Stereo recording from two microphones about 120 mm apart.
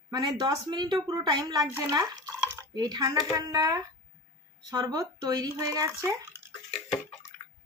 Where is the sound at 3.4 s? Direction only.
30° right (ahead or behind).